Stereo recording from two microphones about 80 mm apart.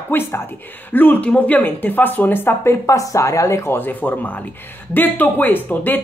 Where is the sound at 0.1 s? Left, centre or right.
Left.